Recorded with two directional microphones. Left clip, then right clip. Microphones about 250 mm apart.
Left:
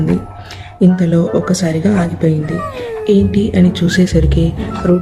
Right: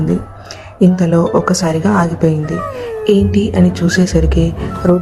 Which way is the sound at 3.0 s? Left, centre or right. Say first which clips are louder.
Right 1 dB; centre.